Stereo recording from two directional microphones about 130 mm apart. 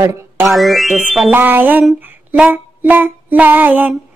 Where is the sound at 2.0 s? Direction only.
15° right (ahead or behind).